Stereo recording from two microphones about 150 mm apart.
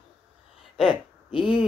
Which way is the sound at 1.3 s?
35° left (ahead or behind).